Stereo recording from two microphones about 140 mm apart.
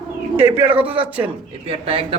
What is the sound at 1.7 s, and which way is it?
Speech, 45° right (ahead or behind).